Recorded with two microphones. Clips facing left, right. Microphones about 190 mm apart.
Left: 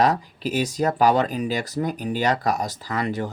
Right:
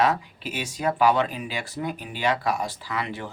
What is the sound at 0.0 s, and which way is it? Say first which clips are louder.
Speech: left 3 dB; 40° left (ahead or behind).